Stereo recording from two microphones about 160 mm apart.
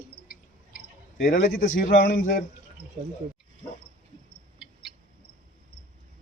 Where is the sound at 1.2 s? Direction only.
60° left (ahead or behind).